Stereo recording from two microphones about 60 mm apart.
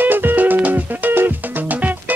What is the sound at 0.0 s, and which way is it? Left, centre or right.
Music, right.